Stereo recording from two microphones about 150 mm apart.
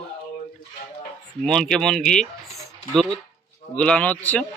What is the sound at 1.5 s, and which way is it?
Speech, 5° left (ahead or behind).